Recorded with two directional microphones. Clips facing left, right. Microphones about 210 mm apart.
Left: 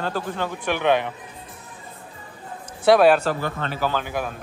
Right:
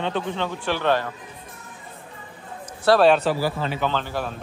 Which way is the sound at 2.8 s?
20° left (ahead or behind).